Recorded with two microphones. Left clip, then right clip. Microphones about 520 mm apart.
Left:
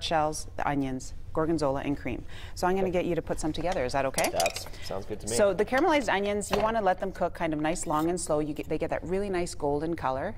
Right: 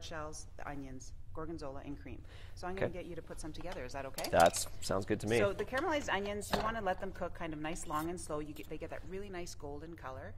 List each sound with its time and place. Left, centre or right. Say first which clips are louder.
0.0 s a woman's voice: left 18 dB; left
4.8 s speech: right 1 dB; right
5.4 s speech: left 10 dB; left